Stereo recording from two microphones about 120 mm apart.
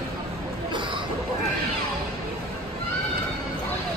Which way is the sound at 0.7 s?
45° right (ahead or behind).